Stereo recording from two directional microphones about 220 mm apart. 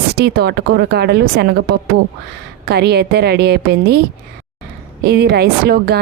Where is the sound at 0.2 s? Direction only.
45° right (ahead or behind).